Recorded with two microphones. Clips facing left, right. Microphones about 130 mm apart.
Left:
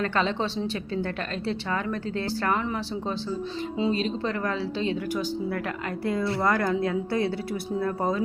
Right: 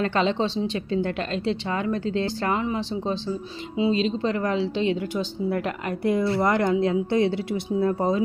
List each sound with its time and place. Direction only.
0.0 s a woman's voice: 25° right (ahead or behind)